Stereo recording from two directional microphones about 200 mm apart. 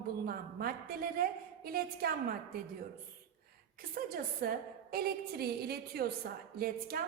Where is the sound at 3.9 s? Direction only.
45° right (ahead or behind).